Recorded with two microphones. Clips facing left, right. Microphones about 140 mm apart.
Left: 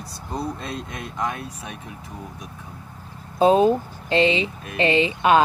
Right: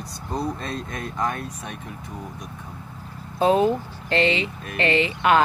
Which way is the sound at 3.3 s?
20° left (ahead or behind).